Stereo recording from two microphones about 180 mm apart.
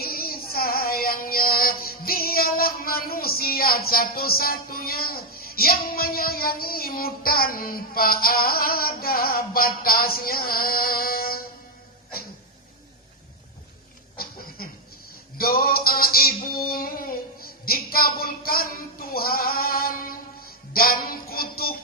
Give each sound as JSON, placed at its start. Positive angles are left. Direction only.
{"t": 0.0, "sound": "female singing", "side_deg": 55}
{"t": 14.2, "sound": "a sound", "side_deg": 55}
{"t": 19.1, "sound": "music", "side_deg": 55}